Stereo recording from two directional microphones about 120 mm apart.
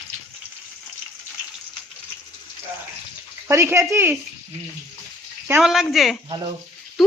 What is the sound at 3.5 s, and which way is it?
Speech, 20° right (ahead or behind).